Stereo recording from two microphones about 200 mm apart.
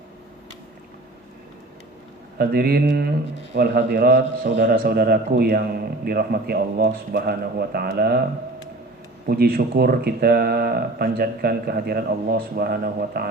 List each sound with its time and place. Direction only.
2.4 s a man's voice: 50° right (ahead or behind)
9.2 s a man's voice: 50° right (ahead or behind)